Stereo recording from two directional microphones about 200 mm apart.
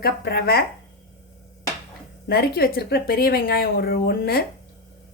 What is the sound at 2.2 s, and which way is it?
A woman's voice, 50° left (ahead or behind).